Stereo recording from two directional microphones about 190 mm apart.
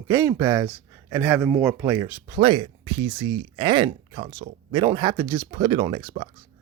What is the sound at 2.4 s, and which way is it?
Speech, 25° right (ahead or behind).